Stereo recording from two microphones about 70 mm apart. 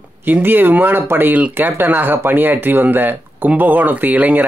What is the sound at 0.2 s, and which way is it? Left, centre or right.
Speech, right.